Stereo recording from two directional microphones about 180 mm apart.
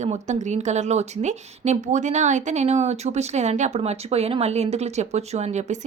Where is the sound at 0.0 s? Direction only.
40° right (ahead or behind).